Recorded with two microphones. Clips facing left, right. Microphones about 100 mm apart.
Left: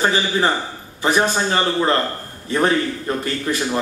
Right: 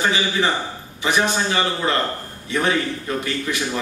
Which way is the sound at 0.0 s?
40° left (ahead or behind).